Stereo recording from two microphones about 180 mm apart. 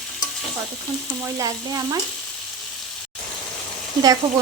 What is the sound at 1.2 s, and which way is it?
Frying, 20° right (ahead or behind).